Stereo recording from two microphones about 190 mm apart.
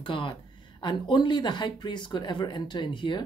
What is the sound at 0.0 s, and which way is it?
Speech, 25° left (ahead or behind).